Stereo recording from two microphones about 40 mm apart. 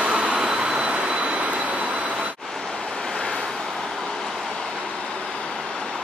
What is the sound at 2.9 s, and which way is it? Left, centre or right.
Vehicle, centre.